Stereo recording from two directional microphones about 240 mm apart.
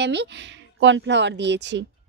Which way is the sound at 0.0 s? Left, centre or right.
Right.